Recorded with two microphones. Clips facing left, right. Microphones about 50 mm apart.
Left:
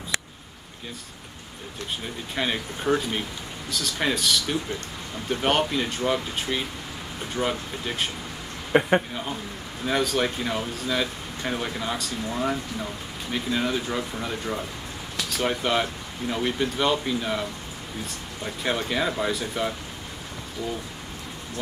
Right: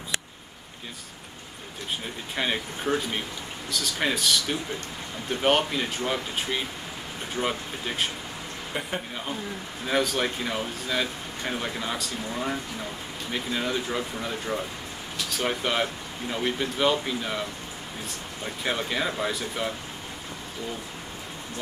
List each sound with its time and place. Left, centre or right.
2.3 s speech: centre
8.7 s speech: left
9.8 s speech: centre